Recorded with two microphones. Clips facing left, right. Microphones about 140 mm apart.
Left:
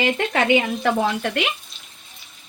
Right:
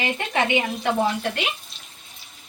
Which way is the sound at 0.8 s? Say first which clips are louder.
Left 2 dB; 65° left (ahead or behind).